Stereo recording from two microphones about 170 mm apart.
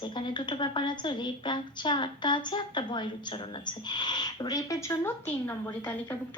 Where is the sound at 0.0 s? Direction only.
25° left (ahead or behind).